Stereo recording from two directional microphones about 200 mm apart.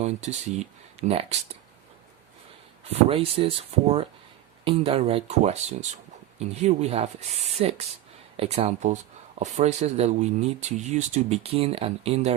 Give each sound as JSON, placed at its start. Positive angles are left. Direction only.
{"t": 0.0, "sound": "speech", "side_deg": -35}
{"t": 3.1, "sound": "speech", "side_deg": -30}